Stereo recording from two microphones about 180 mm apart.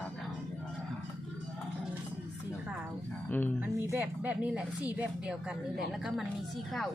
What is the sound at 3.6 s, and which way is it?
A woman's voice, 10° right (ahead or behind).